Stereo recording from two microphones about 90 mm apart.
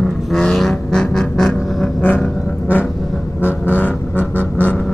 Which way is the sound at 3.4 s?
20° left (ahead or behind).